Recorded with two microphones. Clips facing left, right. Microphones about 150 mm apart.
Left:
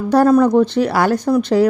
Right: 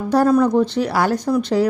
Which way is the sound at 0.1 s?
60° left (ahead or behind).